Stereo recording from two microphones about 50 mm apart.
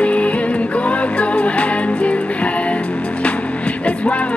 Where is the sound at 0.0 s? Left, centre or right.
Left.